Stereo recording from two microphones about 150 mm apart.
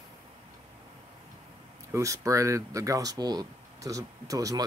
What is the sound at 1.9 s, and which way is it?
Speech, 20° right (ahead or behind).